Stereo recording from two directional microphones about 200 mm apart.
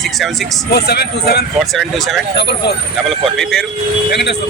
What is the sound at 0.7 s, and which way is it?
Speech, 55° left (ahead or behind).